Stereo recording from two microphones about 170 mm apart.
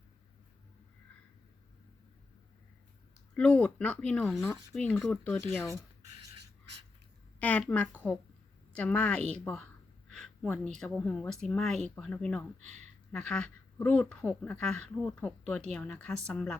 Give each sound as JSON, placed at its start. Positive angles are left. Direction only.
{"t": 3.3, "sound": "speech", "side_deg": 5}
{"t": 7.3, "sound": "speech", "side_deg": 10}
{"t": 10.1, "sound": "a sound", "side_deg": 5}
{"t": 10.8, "sound": "speech", "side_deg": 5}